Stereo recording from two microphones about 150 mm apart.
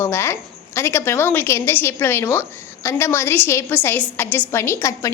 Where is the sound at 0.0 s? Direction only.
15° left (ahead or behind).